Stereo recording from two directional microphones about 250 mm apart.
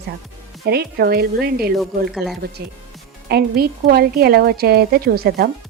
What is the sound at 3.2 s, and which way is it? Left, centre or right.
A woman's voice, right.